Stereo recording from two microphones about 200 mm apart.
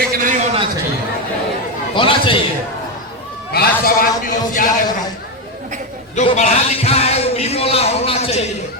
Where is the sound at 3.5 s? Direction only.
50° left (ahead or behind).